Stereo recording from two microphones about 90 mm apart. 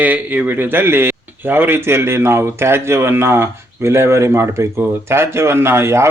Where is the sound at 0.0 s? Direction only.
20° right (ahead or behind).